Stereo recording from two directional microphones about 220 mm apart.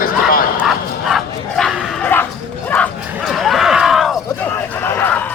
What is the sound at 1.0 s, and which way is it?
Bow-wow, centre (ahead or behind).